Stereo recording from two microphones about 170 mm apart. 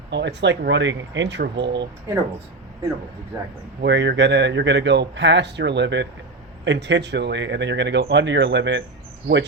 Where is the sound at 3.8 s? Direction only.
90° right.